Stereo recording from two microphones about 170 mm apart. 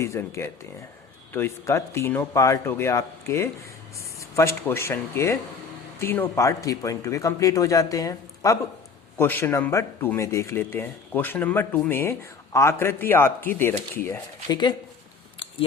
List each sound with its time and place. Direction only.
0.0 s speech: 15° left (ahead or behind)
14.5 s speech: 25° left (ahead or behind)